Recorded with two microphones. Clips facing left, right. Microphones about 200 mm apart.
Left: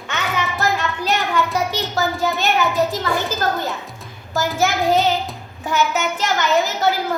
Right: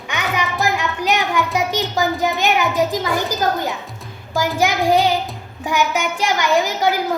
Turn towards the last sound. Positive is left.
turn(degrees=-10)  # may be behind; listen again after turning